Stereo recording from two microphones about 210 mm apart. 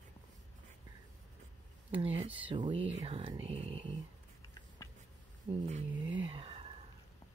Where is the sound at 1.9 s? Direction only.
25° right (ahead or behind).